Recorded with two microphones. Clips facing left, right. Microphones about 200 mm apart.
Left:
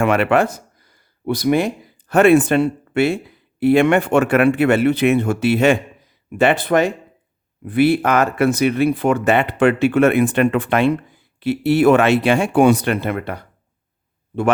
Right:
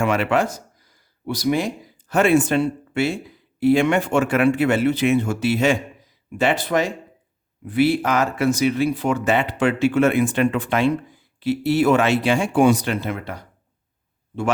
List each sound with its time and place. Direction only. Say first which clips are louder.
0.0 s speech: left 4 dB; 60° left (ahead or behind)